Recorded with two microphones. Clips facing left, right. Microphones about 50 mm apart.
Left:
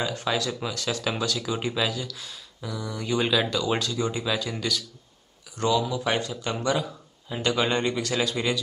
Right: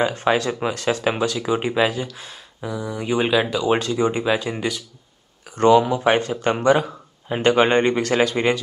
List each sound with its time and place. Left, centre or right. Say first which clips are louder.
0.0 s speech: right 8 dB; right
5.6 s speech: right 10 dB; right